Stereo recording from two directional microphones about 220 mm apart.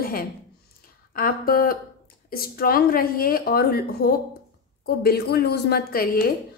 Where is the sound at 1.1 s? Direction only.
40° left (ahead or behind).